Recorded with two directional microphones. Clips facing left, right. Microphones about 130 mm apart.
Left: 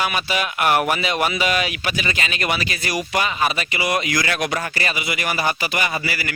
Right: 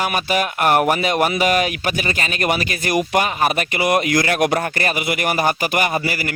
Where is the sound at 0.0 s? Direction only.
45° right (ahead or behind).